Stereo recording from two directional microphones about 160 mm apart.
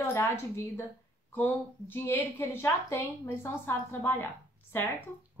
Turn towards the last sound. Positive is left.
turn(degrees=15)  # may be behind; listen again after turning